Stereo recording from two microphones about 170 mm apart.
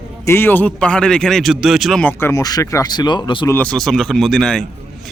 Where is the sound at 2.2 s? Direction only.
20° left (ahead or behind).